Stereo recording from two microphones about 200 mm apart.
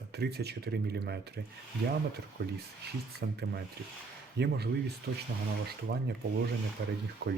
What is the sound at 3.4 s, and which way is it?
A man's voice, 55° right (ahead or behind).